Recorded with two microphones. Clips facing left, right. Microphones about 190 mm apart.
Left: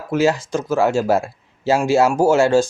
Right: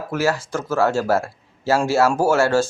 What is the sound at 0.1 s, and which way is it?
Speech, 20° left (ahead or behind).